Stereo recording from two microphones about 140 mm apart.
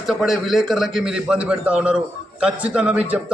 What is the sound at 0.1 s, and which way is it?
A man's voice, centre (ahead or behind).